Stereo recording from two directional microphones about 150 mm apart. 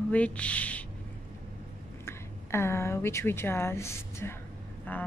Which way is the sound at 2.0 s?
15° left (ahead or behind).